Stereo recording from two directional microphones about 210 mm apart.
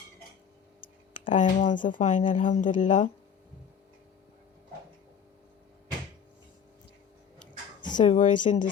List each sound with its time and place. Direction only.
1.1 s speech: 40° left (ahead or behind)
8.0 s speech: 35° left (ahead or behind)